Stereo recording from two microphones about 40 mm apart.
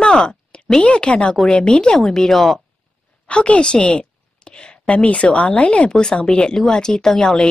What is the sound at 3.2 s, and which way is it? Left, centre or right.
A woman's voice, left.